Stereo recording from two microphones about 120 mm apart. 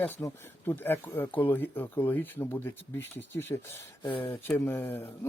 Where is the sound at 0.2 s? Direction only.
20° left (ahead or behind).